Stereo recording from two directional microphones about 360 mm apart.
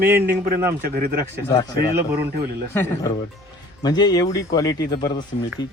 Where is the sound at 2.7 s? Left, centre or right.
Centre.